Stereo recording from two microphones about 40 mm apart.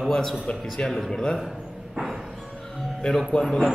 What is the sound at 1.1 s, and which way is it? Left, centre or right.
Speech, centre.